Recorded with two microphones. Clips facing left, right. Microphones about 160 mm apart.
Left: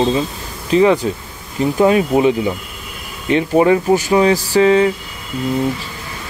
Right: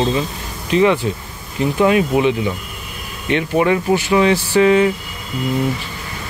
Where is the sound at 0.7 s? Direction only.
35° left (ahead or behind).